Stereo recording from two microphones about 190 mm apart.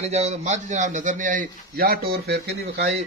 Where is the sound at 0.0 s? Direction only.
35° right (ahead or behind); by 2.9 s 60° right (ahead or behind).